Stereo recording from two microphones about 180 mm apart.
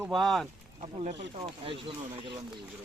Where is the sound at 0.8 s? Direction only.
35° right (ahead or behind).